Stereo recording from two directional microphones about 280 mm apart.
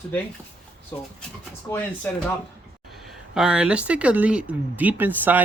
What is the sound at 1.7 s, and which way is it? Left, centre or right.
Speech, centre.